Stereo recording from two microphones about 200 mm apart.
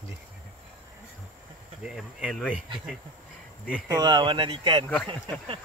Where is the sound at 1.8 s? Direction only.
Centre (ahead or behind).